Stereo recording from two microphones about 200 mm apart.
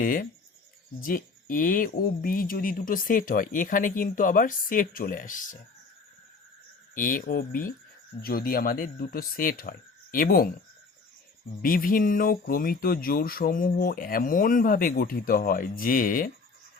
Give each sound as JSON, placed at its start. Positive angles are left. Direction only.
{"t": 0.0, "sound": "speech", "side_deg": 45}
{"t": 6.9, "sound": "speech", "side_deg": 45}
{"t": 11.6, "sound": "speech", "side_deg": 45}